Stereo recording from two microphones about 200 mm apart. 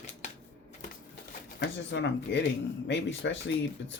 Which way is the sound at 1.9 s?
65° left (ahead or behind).